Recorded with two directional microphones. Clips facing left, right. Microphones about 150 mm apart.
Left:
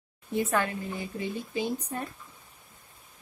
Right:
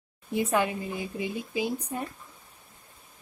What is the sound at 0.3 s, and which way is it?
A woman's voice, 15° right (ahead or behind).